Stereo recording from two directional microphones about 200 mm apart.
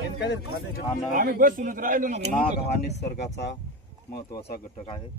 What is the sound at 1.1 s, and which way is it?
Speech, 45° right (ahead or behind).